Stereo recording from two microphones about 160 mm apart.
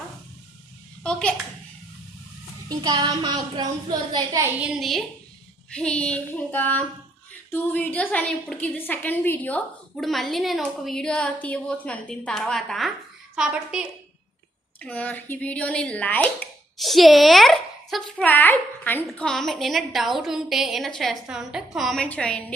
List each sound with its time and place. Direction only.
1.0 s a woman's voice: 10° left (ahead or behind)
2.6 s a woman's voice: 25° right (ahead or behind)
4.6 s a woman's voice: centre (ahead or behind)
14.8 s a woman's voice: 10° left (ahead or behind)